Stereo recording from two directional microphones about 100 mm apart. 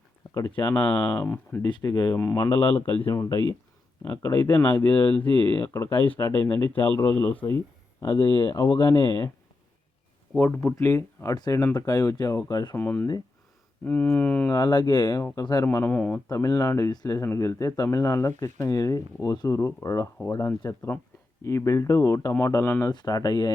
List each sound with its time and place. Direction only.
0.3 s speech: 25° left (ahead or behind)
1.6 s speech: 40° left (ahead or behind)
2.6 s speech: 20° left (ahead or behind)
3.1 s speech: 30° left (ahead or behind)
8.2 s speech: 40° left (ahead or behind)
10.3 s speech: 15° left (ahead or behind)
11.3 s speech: 40° left (ahead or behind)
12.7 s speech: 20° left (ahead or behind)
14.5 s speech: 45° left (ahead or behind)
15.6 s speech: 20° left (ahead or behind)
16.3 s speech: 35° left (ahead or behind)
22.9 s speech: 40° left (ahead or behind)